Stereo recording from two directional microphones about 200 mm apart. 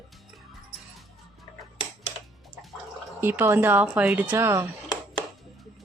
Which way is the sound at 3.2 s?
10° right (ahead or behind).